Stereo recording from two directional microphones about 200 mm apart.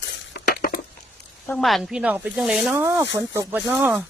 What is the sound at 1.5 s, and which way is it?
Speech, centre (ahead or behind).